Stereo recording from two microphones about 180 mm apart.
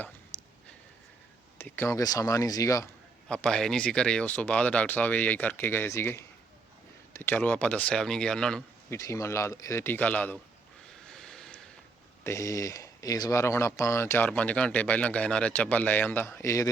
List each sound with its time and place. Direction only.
1.5 s speech: 15° left (ahead or behind)
3.2 s speech: 5° left (ahead or behind)
8.9 s speech: 15° left (ahead or behind)
11.1 s a sound: 5° left (ahead or behind)
12.2 s speech: 15° left (ahead or behind)